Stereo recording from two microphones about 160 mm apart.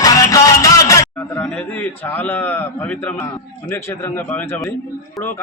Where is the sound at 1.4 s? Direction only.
10° left (ahead or behind).